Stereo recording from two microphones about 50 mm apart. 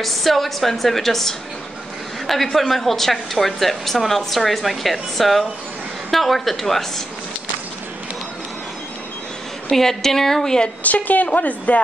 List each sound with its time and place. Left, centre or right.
0.0 s a woman's voice: centre
9.7 s a woman's voice: centre
10.8 s a woman's voice: left